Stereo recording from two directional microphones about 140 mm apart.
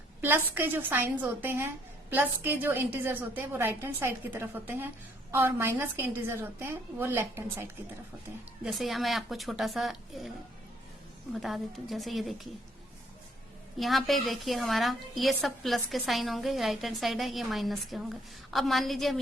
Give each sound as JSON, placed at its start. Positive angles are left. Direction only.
{"t": 0.2, "sound": "a woman's voice", "side_deg": -15}
{"t": 8.6, "sound": "a woman's voice", "side_deg": 0}
{"t": 11.3, "sound": "a woman's voice", "side_deg": 0}
{"t": 13.7, "sound": "a woman's voice", "side_deg": 0}